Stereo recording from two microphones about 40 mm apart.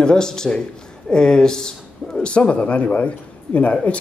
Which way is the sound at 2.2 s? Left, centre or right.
Left.